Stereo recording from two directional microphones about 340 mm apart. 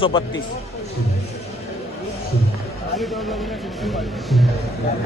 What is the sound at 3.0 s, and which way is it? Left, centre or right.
A man's voice, centre.